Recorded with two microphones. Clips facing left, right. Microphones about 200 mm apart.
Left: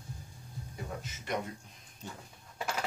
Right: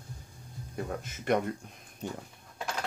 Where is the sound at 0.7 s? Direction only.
55° right (ahead or behind).